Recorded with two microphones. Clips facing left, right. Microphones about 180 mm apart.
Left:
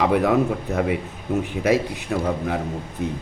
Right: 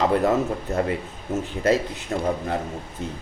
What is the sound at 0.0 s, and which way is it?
Speech, 15° left (ahead or behind).